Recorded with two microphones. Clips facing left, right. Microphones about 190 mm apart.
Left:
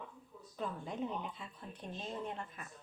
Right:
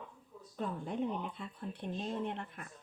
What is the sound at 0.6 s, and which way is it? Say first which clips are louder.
Speech: right 3 dB; 50° right (ahead or behind).